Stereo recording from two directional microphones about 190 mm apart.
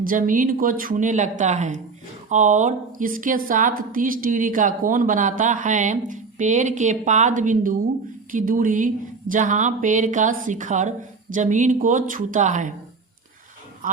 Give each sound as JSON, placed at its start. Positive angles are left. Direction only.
{"t": 0.0, "sound": "a woman's voice", "side_deg": -45}
{"t": 13.8, "sound": "a man's voice", "side_deg": -45}